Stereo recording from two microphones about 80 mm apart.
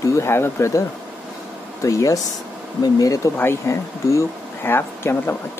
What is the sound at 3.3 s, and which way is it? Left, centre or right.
Speech, left.